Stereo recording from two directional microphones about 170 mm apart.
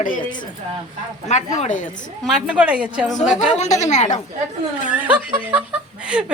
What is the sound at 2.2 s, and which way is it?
Speech, 5° right (ahead or behind).